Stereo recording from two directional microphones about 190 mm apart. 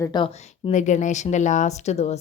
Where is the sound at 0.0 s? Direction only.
25° left (ahead or behind).